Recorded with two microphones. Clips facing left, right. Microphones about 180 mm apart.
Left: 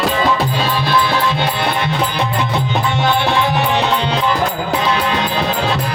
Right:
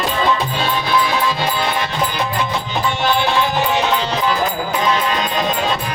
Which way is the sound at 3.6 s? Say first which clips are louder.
Left 1 dB; 65° left (ahead or behind).